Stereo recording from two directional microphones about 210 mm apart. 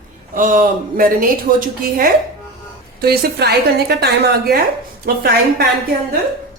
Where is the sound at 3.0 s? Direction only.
50° right (ahead or behind).